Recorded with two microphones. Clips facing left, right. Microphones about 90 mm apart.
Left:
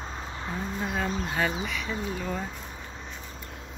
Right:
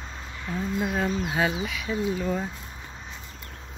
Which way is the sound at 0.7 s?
5° right (ahead or behind).